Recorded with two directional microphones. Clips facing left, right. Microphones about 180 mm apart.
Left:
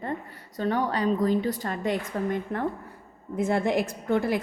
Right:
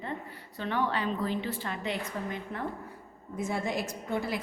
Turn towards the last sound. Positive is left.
turn(degrees=55)  # may be behind; listen again after turning